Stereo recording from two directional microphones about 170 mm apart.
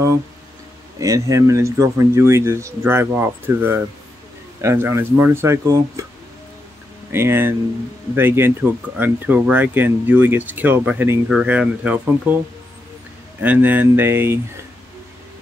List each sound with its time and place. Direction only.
0.9 s speech: 20° right (ahead or behind)
7.1 s speech: 15° right (ahead or behind)
13.4 s speech: 10° right (ahead or behind)